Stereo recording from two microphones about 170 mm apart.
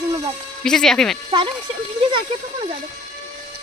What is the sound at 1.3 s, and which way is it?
Speech, 30° right (ahead or behind).